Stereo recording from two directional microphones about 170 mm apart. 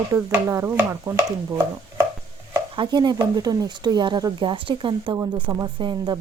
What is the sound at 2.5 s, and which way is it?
Speech, 25° right (ahead or behind).